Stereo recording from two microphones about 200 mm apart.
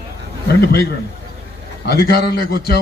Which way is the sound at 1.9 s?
55° left (ahead or behind).